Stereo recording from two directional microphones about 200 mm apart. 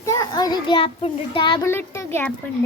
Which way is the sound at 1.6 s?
10° left (ahead or behind).